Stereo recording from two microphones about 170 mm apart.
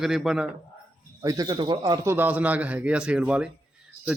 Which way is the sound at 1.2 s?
20° right (ahead or behind).